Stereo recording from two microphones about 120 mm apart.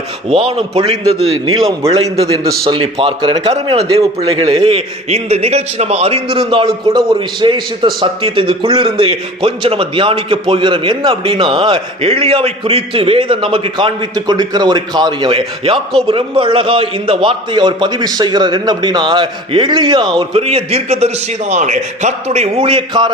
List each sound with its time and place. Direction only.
0.3 s a man's voice: 55° right (ahead or behind)
1.6 s a man's voice: 30° right (ahead or behind)
2.6 s a man's voice: 45° right (ahead or behind)
3.5 s a man's voice: 60° right (ahead or behind); by 20.1 s 35° right (ahead or behind)
20.1 s a man's voice: 55° right (ahead or behind)
21.5 s a man's voice: 80° right; by 23.1 s 45° right (ahead or behind)